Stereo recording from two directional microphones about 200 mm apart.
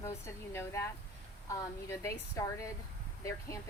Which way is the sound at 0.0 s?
10° left (ahead or behind).